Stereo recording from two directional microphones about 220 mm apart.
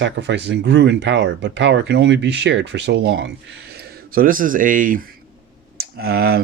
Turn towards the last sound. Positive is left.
turn(degrees=-45)  # may be behind; listen again after turning